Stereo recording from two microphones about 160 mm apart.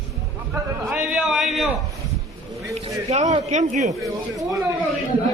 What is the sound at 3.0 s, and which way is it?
Speech, 45° right (ahead or behind).